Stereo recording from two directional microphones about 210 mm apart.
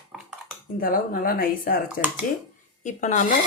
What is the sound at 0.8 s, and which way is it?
Speech, 40° left (ahead or behind).